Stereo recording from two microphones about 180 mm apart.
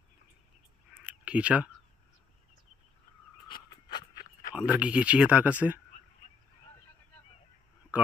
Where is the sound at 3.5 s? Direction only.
25° left (ahead or behind).